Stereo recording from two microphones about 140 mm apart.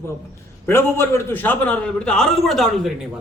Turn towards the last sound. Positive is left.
turn(degrees=0)  # may be behind; listen again after turning